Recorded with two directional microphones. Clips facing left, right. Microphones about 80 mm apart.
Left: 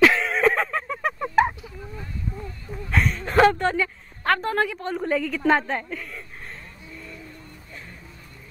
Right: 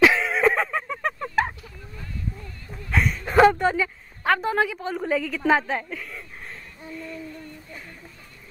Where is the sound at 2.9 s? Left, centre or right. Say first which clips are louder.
Right 1 dB; centre.